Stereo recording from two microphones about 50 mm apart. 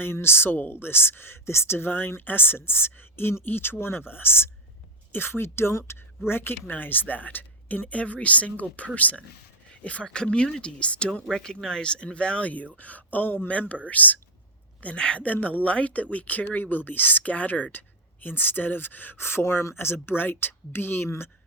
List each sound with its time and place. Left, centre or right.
0.0 s speech: left
13.5 s speech: left
19.2 s speech: left